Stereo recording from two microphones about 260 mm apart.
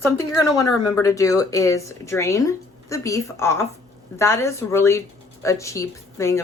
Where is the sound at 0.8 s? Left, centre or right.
Centre.